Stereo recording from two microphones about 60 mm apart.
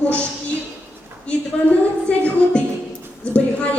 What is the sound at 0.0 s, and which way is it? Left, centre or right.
Speech, left.